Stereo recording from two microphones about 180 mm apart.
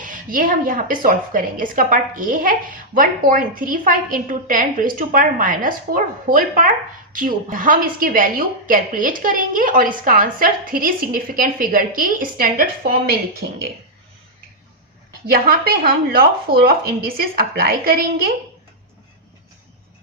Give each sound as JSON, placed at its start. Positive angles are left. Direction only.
{"t": 0.0, "sound": "a woman's voice", "side_deg": -50}
{"t": 15.3, "sound": "speech", "side_deg": -55}